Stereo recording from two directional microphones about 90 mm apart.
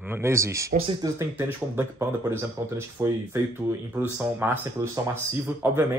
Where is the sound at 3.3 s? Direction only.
30° right (ahead or behind).